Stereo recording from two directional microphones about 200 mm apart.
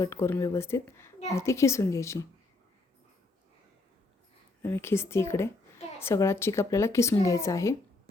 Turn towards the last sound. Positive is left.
turn(degrees=15)  # may be behind; listen again after turning